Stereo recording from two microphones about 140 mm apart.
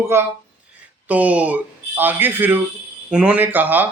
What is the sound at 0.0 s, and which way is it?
Speech, 20° right (ahead or behind).